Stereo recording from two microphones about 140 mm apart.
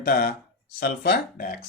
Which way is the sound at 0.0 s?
90° left.